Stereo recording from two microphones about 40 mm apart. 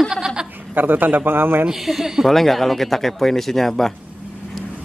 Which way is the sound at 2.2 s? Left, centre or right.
Centre.